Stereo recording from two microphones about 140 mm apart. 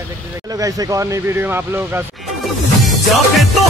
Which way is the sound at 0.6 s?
25° right (ahead or behind).